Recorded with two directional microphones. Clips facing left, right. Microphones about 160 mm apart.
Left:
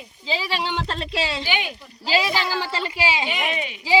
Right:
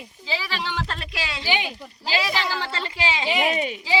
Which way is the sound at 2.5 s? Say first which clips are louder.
Left 3 dB; 10° left (ahead or behind).